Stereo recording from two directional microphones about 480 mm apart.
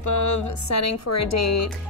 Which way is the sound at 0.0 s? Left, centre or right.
Left.